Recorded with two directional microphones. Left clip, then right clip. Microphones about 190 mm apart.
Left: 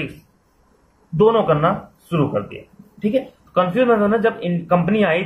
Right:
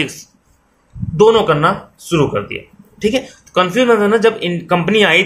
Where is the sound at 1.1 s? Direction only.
40° right (ahead or behind).